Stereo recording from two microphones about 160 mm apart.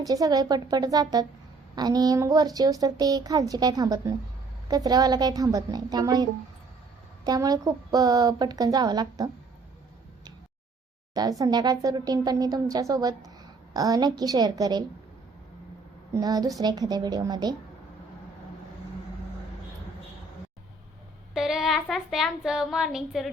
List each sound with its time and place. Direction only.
0.0 s speech: 20° right (ahead or behind)
7.3 s speech: 25° right (ahead or behind)
11.1 s speech: 25° right (ahead or behind)
16.1 s speech: 25° right (ahead or behind)
21.3 s speech: centre (ahead or behind)